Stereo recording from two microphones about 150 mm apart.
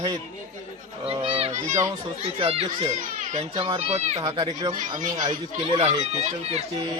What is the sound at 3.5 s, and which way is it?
Speech, 35° right (ahead or behind).